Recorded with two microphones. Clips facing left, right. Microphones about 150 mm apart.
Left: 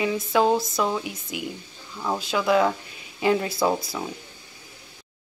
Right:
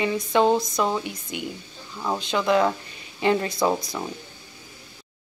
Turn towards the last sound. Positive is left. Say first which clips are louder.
# even
turn(degrees=5)  # may be behind; listen again after turning